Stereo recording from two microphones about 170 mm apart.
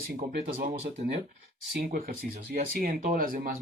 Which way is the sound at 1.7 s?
60° right (ahead or behind).